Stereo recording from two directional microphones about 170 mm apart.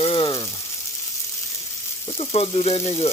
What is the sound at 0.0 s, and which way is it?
Frying, 30° left (ahead or behind).